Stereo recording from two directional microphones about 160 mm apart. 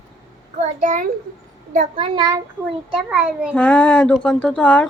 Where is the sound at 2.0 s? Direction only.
30° right (ahead or behind).